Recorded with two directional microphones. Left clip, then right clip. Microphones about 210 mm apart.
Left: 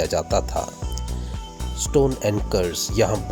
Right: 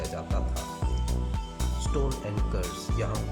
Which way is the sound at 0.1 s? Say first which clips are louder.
Left 13 dB; 35° left (ahead or behind).